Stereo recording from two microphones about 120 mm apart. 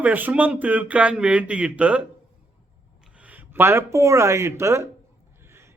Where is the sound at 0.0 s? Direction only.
15° right (ahead or behind).